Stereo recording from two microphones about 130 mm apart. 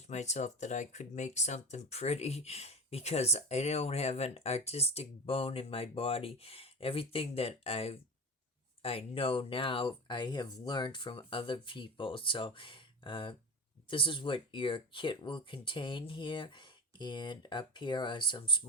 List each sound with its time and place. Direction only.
0.1 s speech: 60° left (ahead or behind); by 18.6 s 40° left (ahead or behind)